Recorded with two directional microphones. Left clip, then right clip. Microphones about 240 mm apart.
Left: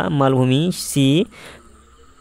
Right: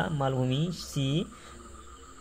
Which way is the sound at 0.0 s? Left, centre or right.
Left.